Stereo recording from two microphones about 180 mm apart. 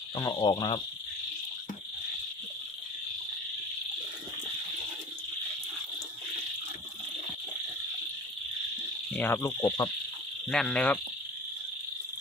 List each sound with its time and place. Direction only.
0.2 s speech: 20° left (ahead or behind)
9.0 s insect: 10° left (ahead or behind)
10.5 s cricket: 5° left (ahead or behind)